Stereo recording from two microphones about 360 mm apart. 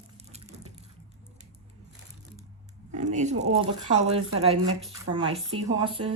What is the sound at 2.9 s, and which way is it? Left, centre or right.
Speech, centre.